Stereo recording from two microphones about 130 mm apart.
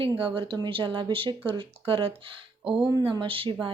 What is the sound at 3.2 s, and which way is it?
Speech, 40° right (ahead or behind).